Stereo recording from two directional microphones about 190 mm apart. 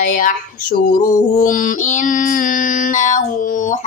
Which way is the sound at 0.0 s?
45° left (ahead or behind).